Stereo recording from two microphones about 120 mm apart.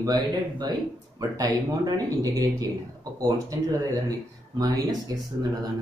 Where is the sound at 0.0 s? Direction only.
35° right (ahead or behind).